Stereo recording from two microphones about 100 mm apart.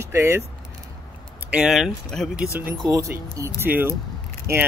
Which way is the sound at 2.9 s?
30° right (ahead or behind).